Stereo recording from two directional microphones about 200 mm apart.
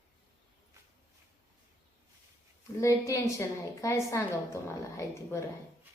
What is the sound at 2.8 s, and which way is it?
A woman's voice, 15° left (ahead or behind).